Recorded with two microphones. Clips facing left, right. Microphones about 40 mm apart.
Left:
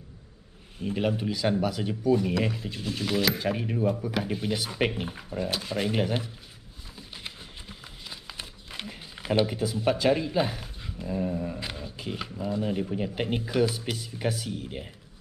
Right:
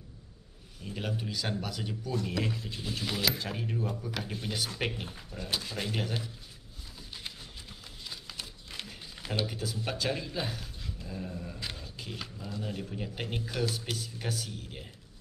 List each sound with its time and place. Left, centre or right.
0.7 s speech: left
1.3 s speech: centre
3.3 s speech: centre
7.0 s a sound: centre
8.4 s speech: left